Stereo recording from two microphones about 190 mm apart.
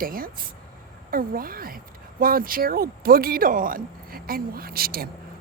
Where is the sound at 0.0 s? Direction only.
50° right (ahead or behind).